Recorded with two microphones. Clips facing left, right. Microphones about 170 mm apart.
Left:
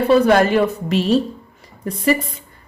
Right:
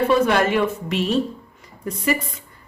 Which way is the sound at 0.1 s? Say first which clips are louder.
Left 9 dB; 40° left (ahead or behind).